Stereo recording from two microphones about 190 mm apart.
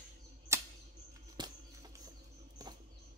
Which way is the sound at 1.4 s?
25° right (ahead or behind).